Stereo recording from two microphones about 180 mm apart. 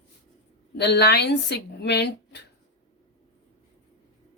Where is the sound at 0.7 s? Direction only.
65° left (ahead or behind).